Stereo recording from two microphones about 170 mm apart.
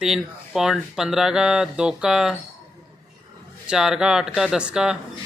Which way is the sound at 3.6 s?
5° right (ahead or behind).